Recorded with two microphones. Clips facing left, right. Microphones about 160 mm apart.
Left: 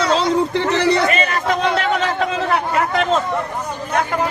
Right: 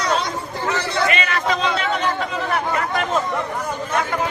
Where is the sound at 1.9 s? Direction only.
90° left.